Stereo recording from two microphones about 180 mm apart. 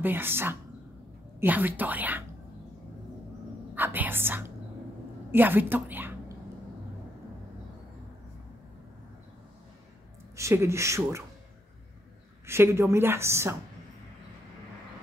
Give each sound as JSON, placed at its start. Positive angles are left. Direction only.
{"t": 0.0, "sound": "a woman's voice", "side_deg": -10}
{"t": 3.7, "sound": "a woman's voice", "side_deg": -10}
{"t": 10.3, "sound": "a woman's voice", "side_deg": -15}
{"t": 12.4, "sound": "a woman's voice", "side_deg": -15}